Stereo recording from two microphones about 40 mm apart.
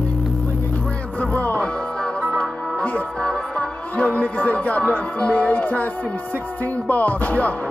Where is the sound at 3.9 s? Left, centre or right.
Left.